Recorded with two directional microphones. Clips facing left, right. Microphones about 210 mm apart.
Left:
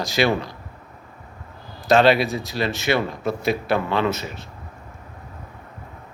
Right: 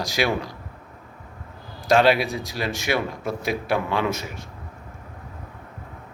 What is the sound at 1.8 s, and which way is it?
Speech, 10° right (ahead or behind).